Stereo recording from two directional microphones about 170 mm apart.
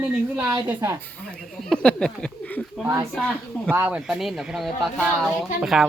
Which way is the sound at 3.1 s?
5° left (ahead or behind).